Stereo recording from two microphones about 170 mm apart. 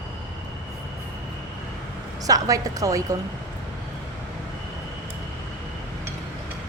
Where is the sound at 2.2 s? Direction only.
20° right (ahead or behind).